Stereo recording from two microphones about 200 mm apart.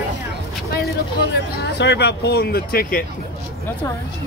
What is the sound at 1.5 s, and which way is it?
Speech, 60° left (ahead or behind).